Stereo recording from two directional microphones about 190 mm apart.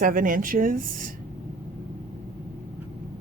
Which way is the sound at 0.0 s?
45° right (ahead or behind).